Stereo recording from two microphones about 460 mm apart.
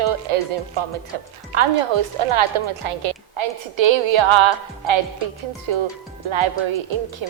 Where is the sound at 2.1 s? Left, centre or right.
Right.